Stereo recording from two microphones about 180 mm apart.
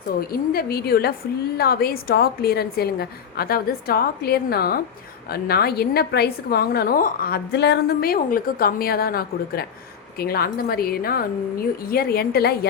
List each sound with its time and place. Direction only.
0.2 s a woman's voice: 55° left (ahead or behind)